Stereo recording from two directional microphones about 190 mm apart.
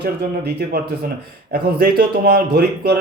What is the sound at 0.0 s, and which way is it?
A man's voice, 55° right (ahead or behind).